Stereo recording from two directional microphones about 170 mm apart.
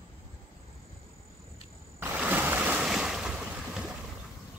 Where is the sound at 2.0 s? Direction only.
10° right (ahead or behind).